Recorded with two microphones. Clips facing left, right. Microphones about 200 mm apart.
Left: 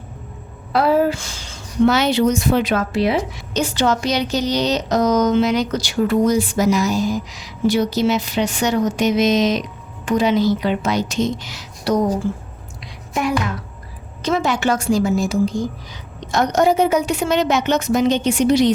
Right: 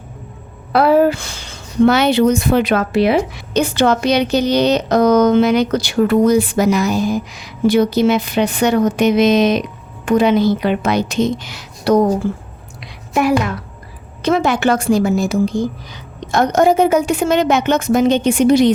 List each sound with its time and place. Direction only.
0.7 s a woman's voice: 65° right (ahead or behind)
14.2 s a woman's voice: 60° right (ahead or behind)